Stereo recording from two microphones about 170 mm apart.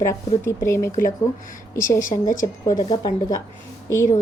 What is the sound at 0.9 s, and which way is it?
Speech, 55° left (ahead or behind).